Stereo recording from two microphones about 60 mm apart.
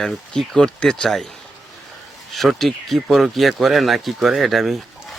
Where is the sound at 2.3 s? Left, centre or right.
Centre.